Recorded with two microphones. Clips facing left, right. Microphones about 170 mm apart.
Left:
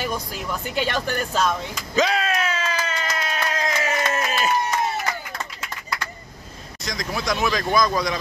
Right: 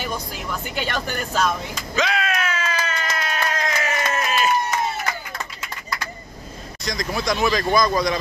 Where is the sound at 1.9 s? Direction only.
35° left (ahead or behind).